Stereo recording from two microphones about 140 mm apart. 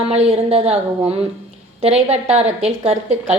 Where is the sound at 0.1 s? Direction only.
50° right (ahead or behind).